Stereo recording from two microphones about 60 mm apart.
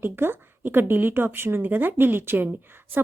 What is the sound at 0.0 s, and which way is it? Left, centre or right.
Speech, right.